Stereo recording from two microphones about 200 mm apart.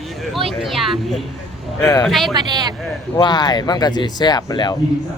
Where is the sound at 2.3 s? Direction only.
20° right (ahead or behind).